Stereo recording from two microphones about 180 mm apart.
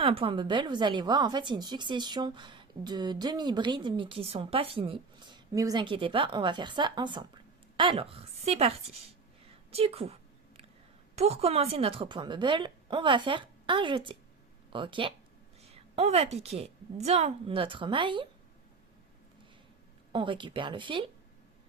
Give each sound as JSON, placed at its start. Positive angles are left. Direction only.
{"t": 0.0, "sound": "a woman's voice", "side_deg": -30}
{"t": 20.1, "sound": "a woman's voice", "side_deg": -25}